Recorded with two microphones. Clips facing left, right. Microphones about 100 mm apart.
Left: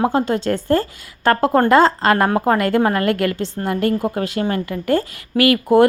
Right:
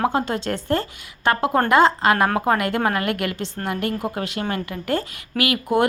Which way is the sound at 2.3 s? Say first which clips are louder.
Left 4 dB; 35° left (ahead or behind).